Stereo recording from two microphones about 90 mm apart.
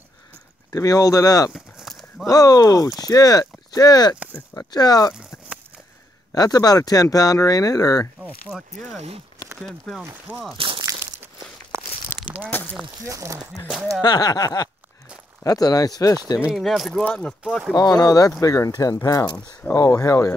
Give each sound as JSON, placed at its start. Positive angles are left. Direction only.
{"t": 0.7, "sound": "speech", "side_deg": 40}
{"t": 1.5, "sound": "a sound", "side_deg": 0}
{"t": 2.2, "sound": "speech", "side_deg": 45}
{"t": 6.3, "sound": "speech", "side_deg": 45}
{"t": 8.5, "sound": "speech", "side_deg": -5}
{"t": 10.3, "sound": "speech", "side_deg": -15}
{"t": 13.0, "sound": "speech", "side_deg": -35}
{"t": 14.0, "sound": "speech", "side_deg": 50}
{"t": 16.5, "sound": "speech", "side_deg": 0}
{"t": 17.7, "sound": "speech", "side_deg": 45}